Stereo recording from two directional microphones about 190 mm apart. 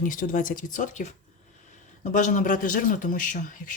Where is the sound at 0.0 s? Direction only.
45° left (ahead or behind).